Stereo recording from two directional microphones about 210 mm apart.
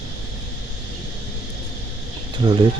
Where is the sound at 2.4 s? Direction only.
20° right (ahead or behind).